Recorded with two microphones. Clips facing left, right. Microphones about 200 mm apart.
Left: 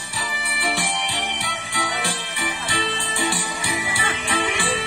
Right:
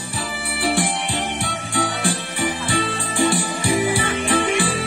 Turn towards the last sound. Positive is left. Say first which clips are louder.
# right 5 dB
turn(degrees=-50)  # may be behind; listen again after turning